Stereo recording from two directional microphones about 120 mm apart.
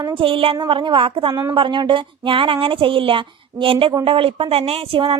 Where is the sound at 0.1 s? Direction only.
50° right (ahead or behind).